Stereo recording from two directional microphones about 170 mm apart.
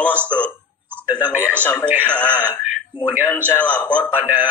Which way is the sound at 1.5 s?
10° left (ahead or behind).